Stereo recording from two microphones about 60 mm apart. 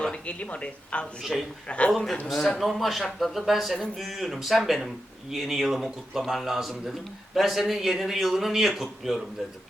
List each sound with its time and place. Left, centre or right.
0.0 s speech: centre
1.2 s a man's voice: centre
1.6 s speech: left
2.3 s a man's voice: centre